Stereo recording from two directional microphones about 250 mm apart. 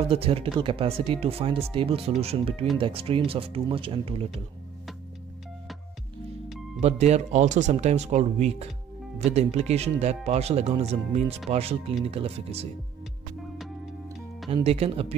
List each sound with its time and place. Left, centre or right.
0.1 s speech: right
6.8 s speech: right
14.5 s speech: right